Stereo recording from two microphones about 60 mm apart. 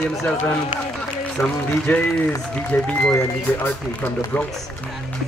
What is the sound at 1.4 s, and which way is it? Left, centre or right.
Speech, left.